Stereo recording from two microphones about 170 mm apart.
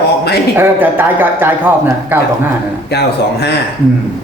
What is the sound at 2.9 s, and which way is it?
Speech, 75° left (ahead or behind).